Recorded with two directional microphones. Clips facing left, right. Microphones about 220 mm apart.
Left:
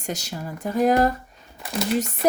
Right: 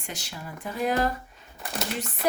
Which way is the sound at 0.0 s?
40° left (ahead or behind).